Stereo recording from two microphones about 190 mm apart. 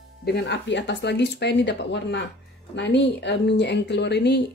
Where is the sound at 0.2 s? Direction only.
60° left (ahead or behind).